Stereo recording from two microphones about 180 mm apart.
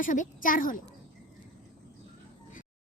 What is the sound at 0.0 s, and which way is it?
Speech, 45° left (ahead or behind).